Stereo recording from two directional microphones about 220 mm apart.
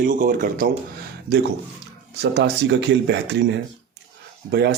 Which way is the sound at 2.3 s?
50° right (ahead or behind).